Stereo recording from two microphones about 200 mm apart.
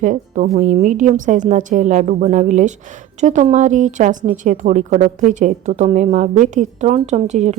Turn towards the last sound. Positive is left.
turn(degrees=-35)  # may be behind; listen again after turning